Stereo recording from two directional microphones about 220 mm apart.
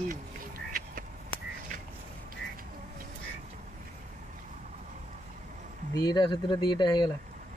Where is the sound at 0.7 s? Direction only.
40° right (ahead or behind).